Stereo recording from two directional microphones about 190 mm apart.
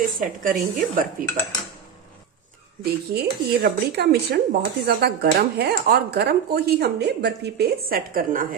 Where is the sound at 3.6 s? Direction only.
60° right (ahead or behind).